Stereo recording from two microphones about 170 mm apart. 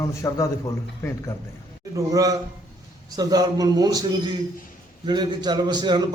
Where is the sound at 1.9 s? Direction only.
20° right (ahead or behind).